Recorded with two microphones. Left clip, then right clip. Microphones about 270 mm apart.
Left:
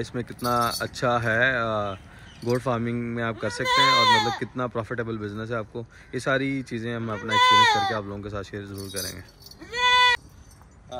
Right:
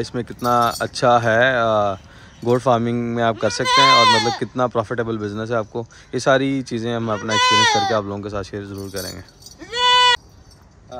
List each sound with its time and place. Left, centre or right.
0.0 s speech: centre
3.6 s speech: right
4.4 s speech: centre
7.2 s speech: right
7.9 s speech: centre
9.7 s bleat: right